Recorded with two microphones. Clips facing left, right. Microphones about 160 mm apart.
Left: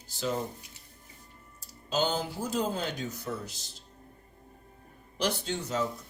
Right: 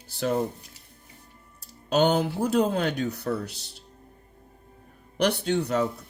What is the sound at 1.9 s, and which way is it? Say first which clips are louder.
Speech: right 8 dB; 65° right (ahead or behind).